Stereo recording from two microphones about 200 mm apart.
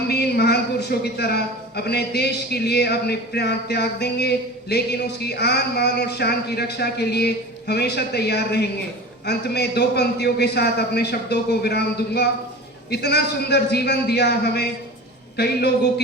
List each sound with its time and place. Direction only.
0.1 s a man's voice: 55° left (ahead or behind)